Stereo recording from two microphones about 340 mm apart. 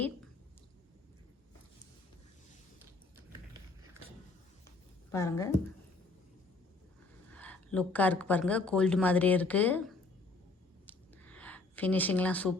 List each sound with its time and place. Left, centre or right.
5.1 s a woman's voice: centre
7.3 s speech: centre
10.8 s a sound: centre